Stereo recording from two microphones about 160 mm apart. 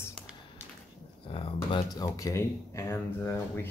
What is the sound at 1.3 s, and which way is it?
Speech, 35° left (ahead or behind).